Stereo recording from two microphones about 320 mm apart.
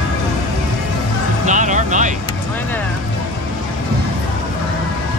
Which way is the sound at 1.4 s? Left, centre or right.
Right.